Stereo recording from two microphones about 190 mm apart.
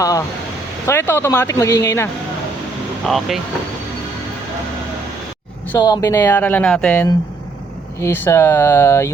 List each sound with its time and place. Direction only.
0.0 s speech: 15° left (ahead or behind)
3.1 s speech: centre (ahead or behind)
5.8 s speech: 20° left (ahead or behind); by 7.0 s 5° left (ahead or behind)
8.0 s speech: 10° left (ahead or behind)